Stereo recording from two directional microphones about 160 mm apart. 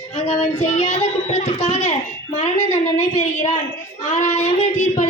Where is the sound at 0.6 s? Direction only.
45° left (ahead or behind).